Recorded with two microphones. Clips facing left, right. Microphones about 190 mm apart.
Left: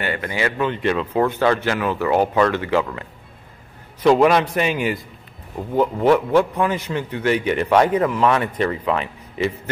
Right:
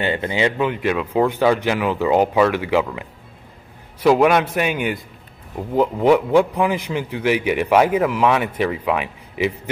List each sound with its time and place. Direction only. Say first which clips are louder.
0.0 s speech: right 3 dB; 25° right (ahead or behind)
0.7 s a man's voice: even; 5° right (ahead or behind)
5.8 s a man's voice: right 1 dB; 10° right (ahead or behind)